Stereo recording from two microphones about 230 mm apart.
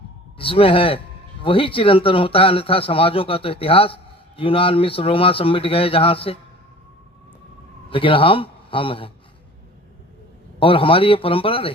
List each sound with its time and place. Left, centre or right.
0.3 s speech: left
7.9 s a man's voice: left
10.6 s speech: left